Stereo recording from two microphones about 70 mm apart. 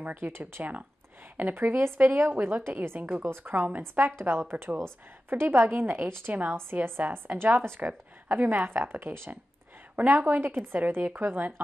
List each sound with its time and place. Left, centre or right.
0.0 s speech: right